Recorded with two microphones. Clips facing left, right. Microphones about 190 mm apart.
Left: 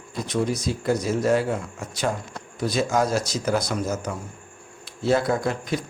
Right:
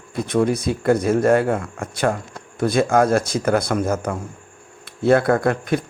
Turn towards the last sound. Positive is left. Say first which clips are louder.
# right 6 dB
turn(degrees=-55)  # may be behind; listen again after turning